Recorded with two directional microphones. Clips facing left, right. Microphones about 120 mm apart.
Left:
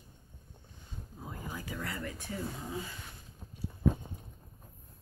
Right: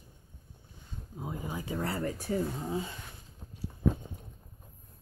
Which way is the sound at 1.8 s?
35° right (ahead or behind).